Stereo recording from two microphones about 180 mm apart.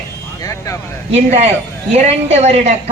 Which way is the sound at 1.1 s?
35° right (ahead or behind).